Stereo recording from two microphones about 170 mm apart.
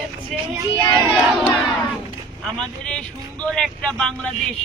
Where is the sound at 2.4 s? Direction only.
5° left (ahead or behind).